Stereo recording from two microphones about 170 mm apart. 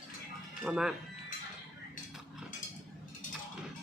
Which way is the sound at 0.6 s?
5° right (ahead or behind).